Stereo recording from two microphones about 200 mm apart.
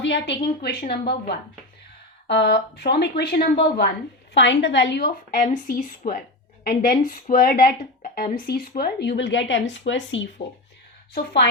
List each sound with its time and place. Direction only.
0.0 s speech: 60° left (ahead or behind)
2.2 s speech: 55° left (ahead or behind)
4.4 s speech: 60° left (ahead or behind)